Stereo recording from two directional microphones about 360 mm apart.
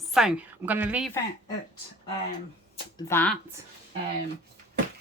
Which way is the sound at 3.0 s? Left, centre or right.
Centre.